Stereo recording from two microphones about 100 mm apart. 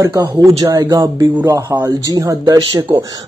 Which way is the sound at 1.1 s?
25° right (ahead or behind).